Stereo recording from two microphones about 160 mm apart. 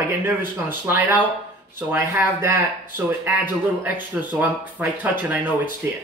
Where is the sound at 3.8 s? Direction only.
10° right (ahead or behind).